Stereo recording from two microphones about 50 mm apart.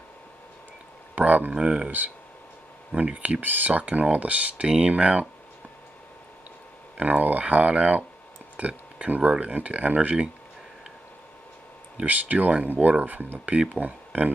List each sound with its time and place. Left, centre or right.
1.1 s speech: right
1.5 s speech: centre
3.2 s speech: right
3.8 s speech: right
7.0 s speech: right
12.1 s speech: right